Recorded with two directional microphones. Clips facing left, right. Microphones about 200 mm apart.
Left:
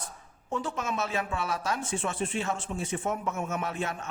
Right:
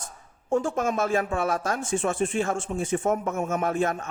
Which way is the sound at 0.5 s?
45° right (ahead or behind).